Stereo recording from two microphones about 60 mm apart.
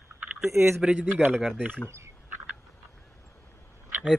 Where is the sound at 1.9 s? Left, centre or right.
Right.